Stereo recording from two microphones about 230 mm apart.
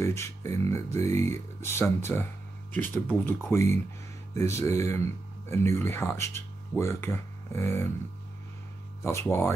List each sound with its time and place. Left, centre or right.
0.0 s speech: centre
9.0 s speech: centre